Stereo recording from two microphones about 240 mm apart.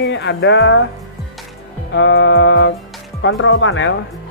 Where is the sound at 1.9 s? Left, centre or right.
Left.